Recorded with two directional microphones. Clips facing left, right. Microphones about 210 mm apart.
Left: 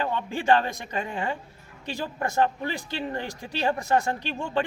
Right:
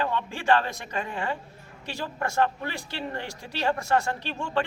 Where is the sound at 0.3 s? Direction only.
20° left (ahead or behind).